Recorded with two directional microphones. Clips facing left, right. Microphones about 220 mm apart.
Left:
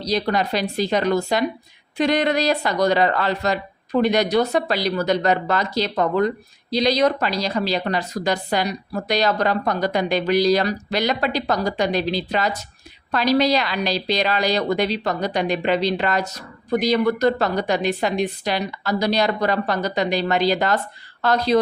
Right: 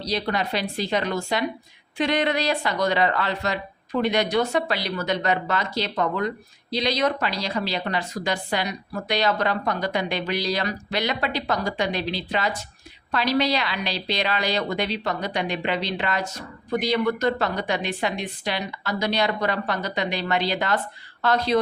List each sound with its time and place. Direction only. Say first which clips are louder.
0.0 s speech: left 4 dB; 40° left (ahead or behind)